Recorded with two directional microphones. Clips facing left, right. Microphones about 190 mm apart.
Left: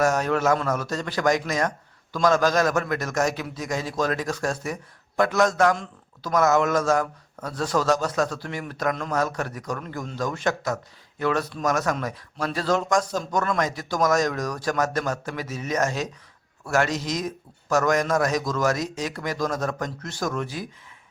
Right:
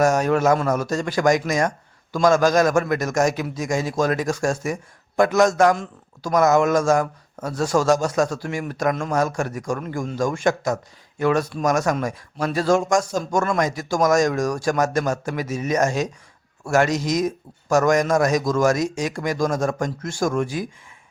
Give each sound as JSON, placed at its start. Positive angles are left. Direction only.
{"t": 0.0, "sound": "speech", "side_deg": -15}
{"t": 18.4, "sound": "speech", "side_deg": -45}
{"t": 18.9, "sound": "speech", "side_deg": -15}